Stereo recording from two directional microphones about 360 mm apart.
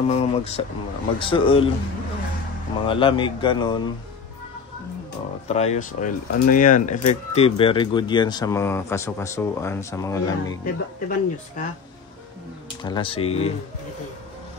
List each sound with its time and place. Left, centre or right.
0.1 s speech: centre
2.8 s speech: centre
5.5 s speech: centre
10.6 s speech: left
12.8 s speech: centre